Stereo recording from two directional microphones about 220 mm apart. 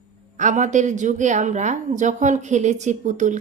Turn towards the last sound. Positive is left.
turn(degrees=-35)  # may be behind; listen again after turning